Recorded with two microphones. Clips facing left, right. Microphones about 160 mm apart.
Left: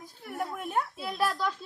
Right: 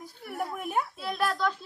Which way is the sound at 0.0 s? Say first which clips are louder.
Right 1 dB; 5° right (ahead or behind).